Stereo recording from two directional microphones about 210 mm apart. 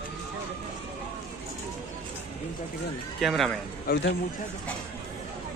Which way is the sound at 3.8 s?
55° left (ahead or behind).